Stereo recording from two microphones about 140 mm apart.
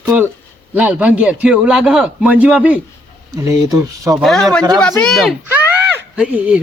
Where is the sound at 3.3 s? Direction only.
20° right (ahead or behind).